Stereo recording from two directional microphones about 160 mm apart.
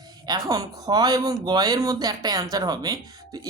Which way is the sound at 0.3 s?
25° right (ahead or behind).